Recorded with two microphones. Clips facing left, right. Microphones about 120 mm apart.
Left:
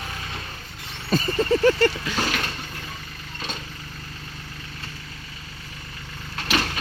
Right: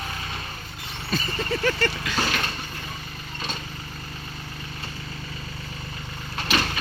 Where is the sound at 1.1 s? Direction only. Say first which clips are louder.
Left 7 dB; 35° left (ahead or behind).